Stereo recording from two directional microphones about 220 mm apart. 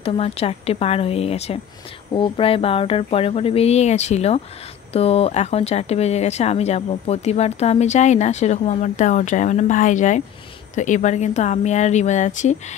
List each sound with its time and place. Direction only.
0.0 s speech: 25° left (ahead or behind)